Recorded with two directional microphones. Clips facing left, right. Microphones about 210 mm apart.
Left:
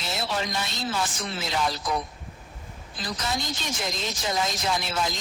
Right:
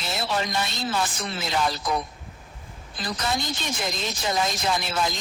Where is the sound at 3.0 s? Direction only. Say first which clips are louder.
Right 2 dB; 60° right (ahead or behind).